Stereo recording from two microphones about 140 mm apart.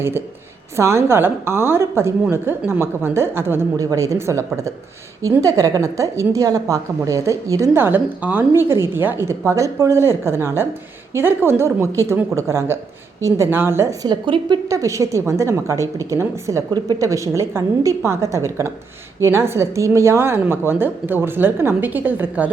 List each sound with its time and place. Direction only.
0.8 s a woman's voice: 20° right (ahead or behind)
14.1 s a woman's voice: 35° right (ahead or behind)
14.7 s a woman's voice: 20° right (ahead or behind)